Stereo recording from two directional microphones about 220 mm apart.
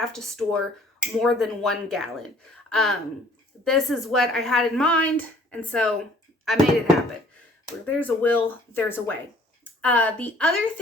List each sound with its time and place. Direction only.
0.0 s a woman's voice: centre (ahead or behind)